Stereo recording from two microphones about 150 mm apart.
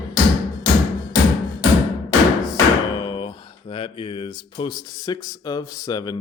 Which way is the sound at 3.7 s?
35° left (ahead or behind).